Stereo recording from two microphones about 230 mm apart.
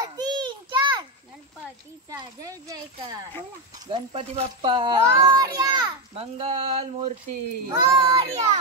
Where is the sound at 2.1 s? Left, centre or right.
Centre.